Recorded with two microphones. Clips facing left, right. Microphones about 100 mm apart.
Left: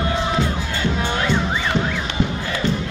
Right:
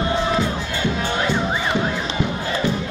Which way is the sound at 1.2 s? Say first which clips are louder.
Right 1 dB; 15° right (ahead or behind).